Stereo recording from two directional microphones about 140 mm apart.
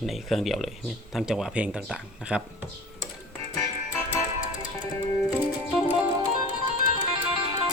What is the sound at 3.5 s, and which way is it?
Music, 15° left (ahead or behind).